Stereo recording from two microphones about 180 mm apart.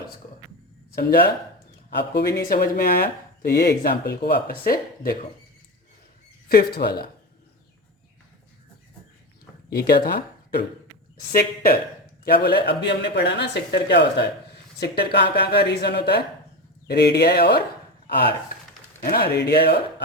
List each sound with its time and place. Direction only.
1.9 s speech: 65° left (ahead or behind)
2.5 s speech: 55° left (ahead or behind)
6.5 s speech: 60° left (ahead or behind)
9.6 s speech: 60° left (ahead or behind)